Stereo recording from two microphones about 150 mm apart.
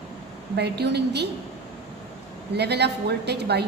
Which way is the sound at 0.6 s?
90° right.